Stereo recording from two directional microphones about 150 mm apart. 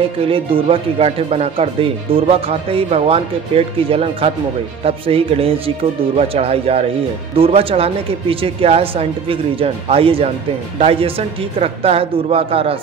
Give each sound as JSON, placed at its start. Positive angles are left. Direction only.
{"t": 0.3, "sound": "speech", "side_deg": -35}